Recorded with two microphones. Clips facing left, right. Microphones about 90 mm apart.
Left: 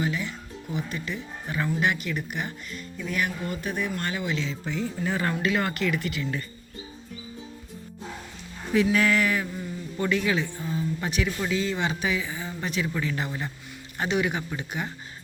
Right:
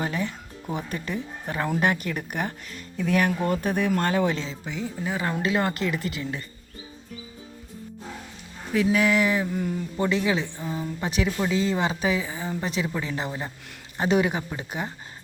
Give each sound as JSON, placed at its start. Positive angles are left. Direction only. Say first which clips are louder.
{"t": 0.0, "sound": "speech", "louder": "right 1 dB", "side_deg": -50}
{"t": 4.6, "sound": "speech", "louder": "left 1 dB", "side_deg": -15}
{"t": 5.4, "sound": "speech", "louder": "right 1 dB", "side_deg": -25}
{"t": 8.7, "sound": "speech", "louder": "even", "side_deg": 0}
{"t": 9.0, "sound": "speech", "louder": "right 2 dB", "side_deg": -15}